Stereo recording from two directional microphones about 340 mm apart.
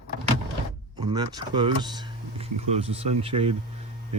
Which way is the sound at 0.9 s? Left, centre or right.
Centre.